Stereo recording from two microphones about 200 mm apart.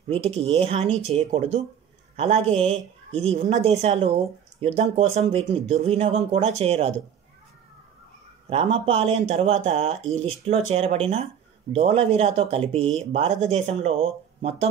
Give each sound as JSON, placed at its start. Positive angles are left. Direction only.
{"t": 0.1, "sound": "speech", "side_deg": -30}
{"t": 8.5, "sound": "speech", "side_deg": -25}